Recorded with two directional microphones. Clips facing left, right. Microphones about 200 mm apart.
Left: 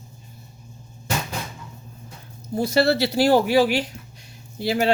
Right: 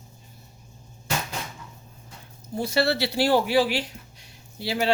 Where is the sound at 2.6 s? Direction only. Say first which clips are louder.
Left 4 dB; 40° left (ahead or behind).